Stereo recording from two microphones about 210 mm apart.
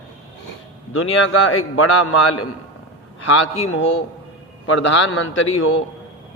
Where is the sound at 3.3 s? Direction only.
70° left (ahead or behind).